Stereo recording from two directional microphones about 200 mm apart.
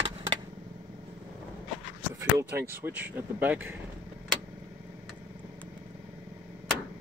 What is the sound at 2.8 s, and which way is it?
Speech, 10° right (ahead or behind).